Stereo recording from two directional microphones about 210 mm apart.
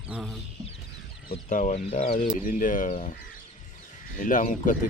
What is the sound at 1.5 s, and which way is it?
Speech, 35° left (ahead or behind).